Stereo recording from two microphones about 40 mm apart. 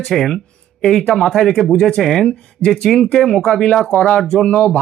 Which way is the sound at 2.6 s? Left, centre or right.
Left.